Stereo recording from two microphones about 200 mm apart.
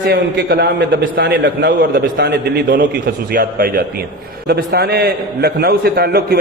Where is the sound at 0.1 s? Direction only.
50° right (ahead or behind).